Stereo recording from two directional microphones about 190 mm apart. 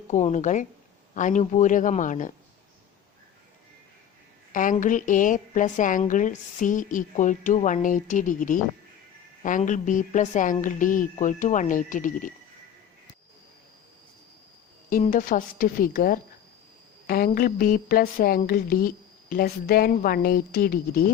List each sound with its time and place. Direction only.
0.1 s speech: 40° left (ahead or behind)
4.5 s a woman's voice: 45° left (ahead or behind)
14.8 s a woman's voice: 45° left (ahead or behind)